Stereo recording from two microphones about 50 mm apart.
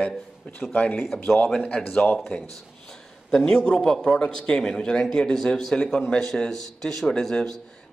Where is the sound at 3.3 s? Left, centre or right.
Centre.